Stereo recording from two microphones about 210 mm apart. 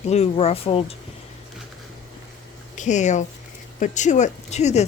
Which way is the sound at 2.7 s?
35° left (ahead or behind).